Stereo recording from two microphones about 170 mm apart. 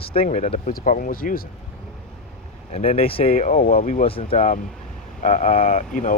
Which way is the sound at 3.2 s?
55° left (ahead or behind).